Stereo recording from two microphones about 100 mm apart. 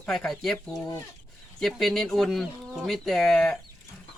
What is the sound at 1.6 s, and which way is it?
Speech, centre (ahead or behind).